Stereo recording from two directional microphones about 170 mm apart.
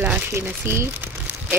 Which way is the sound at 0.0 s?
10° right (ahead or behind).